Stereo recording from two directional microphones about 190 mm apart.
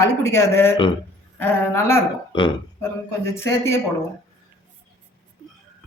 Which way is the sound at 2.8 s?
15° left (ahead or behind).